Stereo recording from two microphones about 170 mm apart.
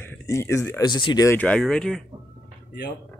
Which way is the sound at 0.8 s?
25° left (ahead or behind).